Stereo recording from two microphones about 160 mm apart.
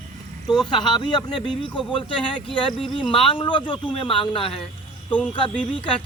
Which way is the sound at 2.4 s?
30° left (ahead or behind).